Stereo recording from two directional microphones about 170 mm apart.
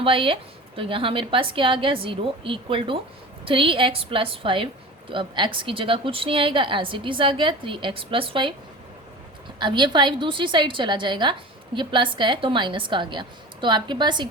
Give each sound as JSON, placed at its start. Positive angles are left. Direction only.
{"t": 0.0, "sound": "a woman's voice", "side_deg": -30}
{"t": 9.6, "sound": "a woman's voice", "side_deg": -25}